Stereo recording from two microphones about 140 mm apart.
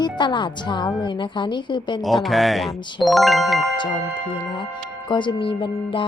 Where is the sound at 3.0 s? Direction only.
Centre (ahead or behind).